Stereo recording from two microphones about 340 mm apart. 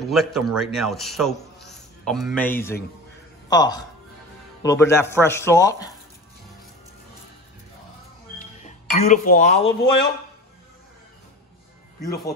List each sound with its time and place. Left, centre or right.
0.0 s a man's voice: centre
8.4 s speech: left